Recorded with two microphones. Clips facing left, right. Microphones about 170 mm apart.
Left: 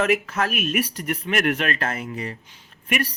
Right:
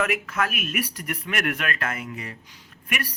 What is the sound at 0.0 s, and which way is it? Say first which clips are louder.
Speech: left 4 dB; 30° left (ahead or behind).